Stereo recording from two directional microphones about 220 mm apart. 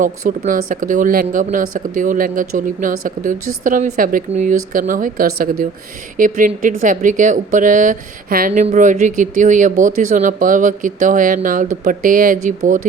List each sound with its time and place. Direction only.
0.3 s a woman's voice: 40° right (ahead or behind)